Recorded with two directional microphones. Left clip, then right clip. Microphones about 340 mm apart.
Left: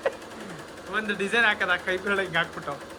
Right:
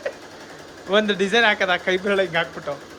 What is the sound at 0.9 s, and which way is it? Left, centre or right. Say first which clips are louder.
Speech: right 8 dB; centre.